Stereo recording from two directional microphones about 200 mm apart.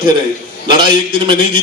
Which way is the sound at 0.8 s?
25° right (ahead or behind).